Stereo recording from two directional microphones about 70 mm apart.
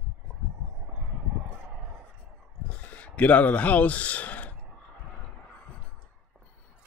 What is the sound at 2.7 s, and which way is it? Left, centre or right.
Speech, left.